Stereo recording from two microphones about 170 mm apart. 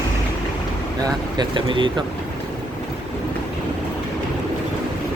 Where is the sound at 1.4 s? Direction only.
30° right (ahead or behind).